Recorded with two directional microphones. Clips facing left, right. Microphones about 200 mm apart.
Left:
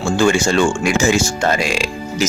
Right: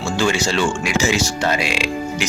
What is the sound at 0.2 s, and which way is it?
Speech, 50° left (ahead or behind).